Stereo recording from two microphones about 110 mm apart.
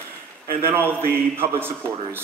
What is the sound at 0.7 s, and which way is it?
A man's voice, 20° right (ahead or behind).